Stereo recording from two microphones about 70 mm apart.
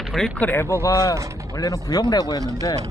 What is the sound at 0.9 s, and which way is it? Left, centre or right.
Speech, left.